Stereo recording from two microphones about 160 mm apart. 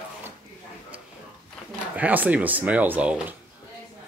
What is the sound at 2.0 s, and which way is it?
Speech, 10° right (ahead or behind).